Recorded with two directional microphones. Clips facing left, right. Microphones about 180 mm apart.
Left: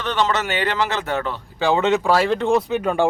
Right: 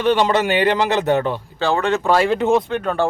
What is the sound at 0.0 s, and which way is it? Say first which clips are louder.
A man's voice: right 5 dB; 15° right (ahead or behind).